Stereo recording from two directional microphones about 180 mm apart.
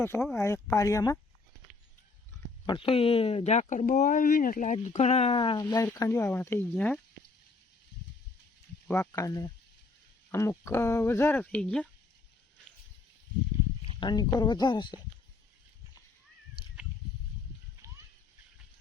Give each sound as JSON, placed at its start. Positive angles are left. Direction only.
{"t": 0.0, "sound": "speech", "side_deg": 15}
{"t": 2.6, "sound": "speech", "side_deg": 30}
{"t": 8.9, "sound": "speech", "side_deg": 15}
{"t": 14.0, "sound": "speech", "side_deg": 20}